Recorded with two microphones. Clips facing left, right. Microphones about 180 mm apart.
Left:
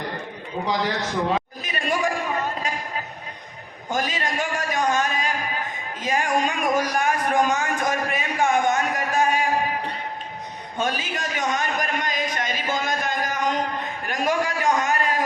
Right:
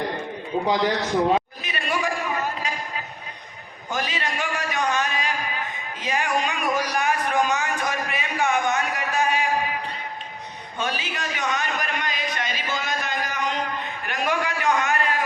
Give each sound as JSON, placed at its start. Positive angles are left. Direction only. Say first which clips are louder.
{"t": 1.6, "sound": "a sound", "louder": "left 2 dB", "side_deg": 45}
{"t": 3.9, "sound": "a man's voice", "louder": "left 2 dB", "side_deg": 45}
{"t": 10.8, "sound": "a man's voice", "louder": "left 2 dB", "side_deg": 45}